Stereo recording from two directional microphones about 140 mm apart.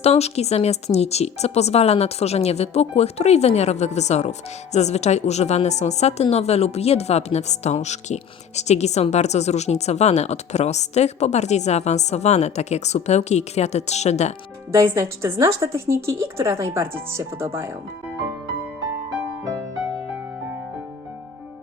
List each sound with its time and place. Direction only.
0.0 s speech: 50° left (ahead or behind)
14.7 s a woman's voice: 20° right (ahead or behind)